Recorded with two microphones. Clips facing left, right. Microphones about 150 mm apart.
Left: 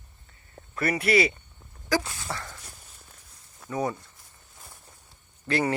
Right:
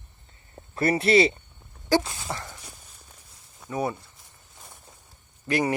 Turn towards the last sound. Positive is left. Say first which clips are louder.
# right 1 dB
turn(degrees=-15)  # may be behind; listen again after turning